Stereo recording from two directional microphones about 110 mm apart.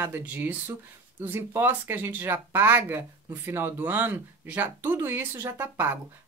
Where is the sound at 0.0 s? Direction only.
15° right (ahead or behind).